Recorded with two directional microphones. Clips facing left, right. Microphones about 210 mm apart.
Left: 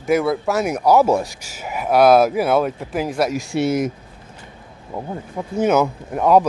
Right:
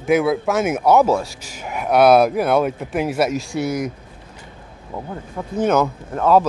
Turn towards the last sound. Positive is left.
turn(degrees=15)  # may be behind; listen again after turning